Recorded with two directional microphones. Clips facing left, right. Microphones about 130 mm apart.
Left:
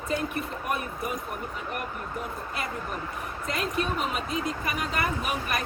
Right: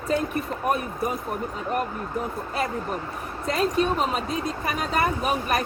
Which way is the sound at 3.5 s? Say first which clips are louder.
Right 7 dB; 35° right (ahead or behind).